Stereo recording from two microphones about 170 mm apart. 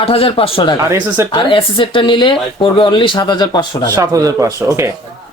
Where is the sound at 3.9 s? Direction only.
20° right (ahead or behind).